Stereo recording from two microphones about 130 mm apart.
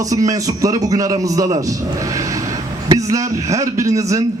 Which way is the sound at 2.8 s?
25° right (ahead or behind).